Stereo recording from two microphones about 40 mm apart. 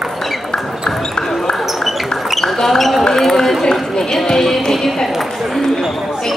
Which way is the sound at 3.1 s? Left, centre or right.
Centre.